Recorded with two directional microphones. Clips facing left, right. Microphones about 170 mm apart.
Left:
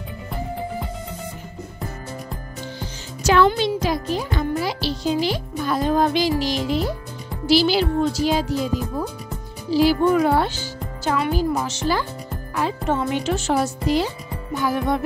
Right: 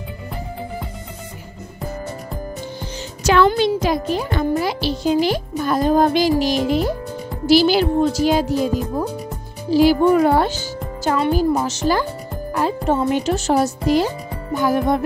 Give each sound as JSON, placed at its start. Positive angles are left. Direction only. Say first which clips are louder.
{"t": 3.4, "sound": "a child's voice", "louder": "right 3 dB", "side_deg": -55}